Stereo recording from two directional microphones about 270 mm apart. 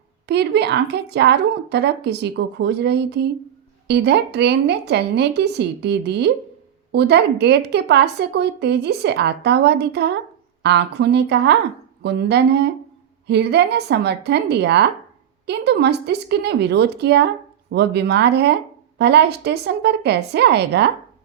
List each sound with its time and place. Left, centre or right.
0.3 s a woman's voice: right